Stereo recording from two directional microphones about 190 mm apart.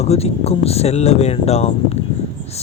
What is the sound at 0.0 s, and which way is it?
Speech, 35° left (ahead or behind).